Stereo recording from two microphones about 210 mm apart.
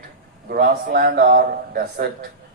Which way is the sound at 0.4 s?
45° right (ahead or behind).